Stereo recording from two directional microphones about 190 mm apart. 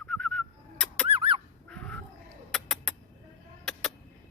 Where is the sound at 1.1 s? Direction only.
30° right (ahead or behind).